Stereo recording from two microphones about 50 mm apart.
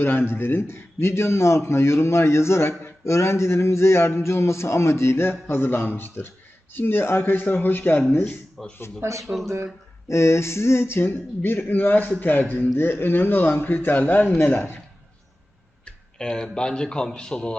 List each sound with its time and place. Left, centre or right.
0.0 s a man's voice: left
8.6 s a man's voice: centre
9.0 s speech: right
9.2 s speech: centre
10.1 s speech: left
11.1 s a man's voice: left
16.1 s a man's voice: centre